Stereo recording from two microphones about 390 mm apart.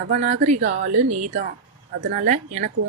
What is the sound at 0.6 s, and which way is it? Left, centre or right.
Speech, right.